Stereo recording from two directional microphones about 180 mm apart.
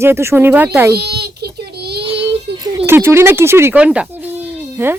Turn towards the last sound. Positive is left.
turn(degrees=-10)  # may be behind; listen again after turning